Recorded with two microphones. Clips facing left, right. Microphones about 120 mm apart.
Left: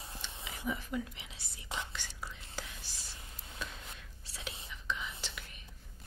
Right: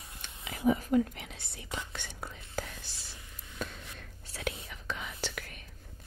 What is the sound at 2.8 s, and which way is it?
Whispering, 45° left (ahead or behind).